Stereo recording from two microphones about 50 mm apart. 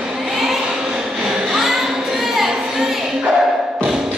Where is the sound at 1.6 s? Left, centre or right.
Centre.